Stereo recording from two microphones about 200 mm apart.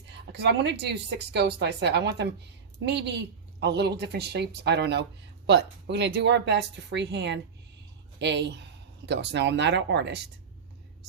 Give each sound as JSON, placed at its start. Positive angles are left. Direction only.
{"t": 0.3, "sound": "speech", "side_deg": -60}